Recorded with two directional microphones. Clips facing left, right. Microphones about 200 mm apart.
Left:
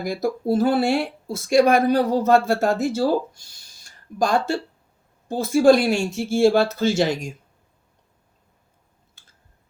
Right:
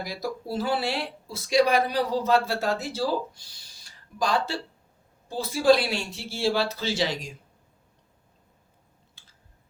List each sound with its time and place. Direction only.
0.0 s speech: 50° left (ahead or behind)